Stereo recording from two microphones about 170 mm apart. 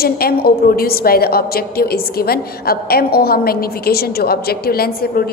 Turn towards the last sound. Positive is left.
turn(degrees=65)  # may be behind; listen again after turning